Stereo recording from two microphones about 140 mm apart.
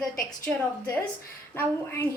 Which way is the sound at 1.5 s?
15° left (ahead or behind).